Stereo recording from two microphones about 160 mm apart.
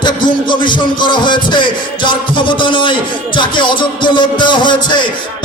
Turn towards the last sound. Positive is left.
turn(degrees=30)  # may be behind; listen again after turning